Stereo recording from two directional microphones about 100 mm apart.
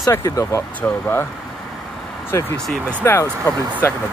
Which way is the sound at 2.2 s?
20° left (ahead or behind).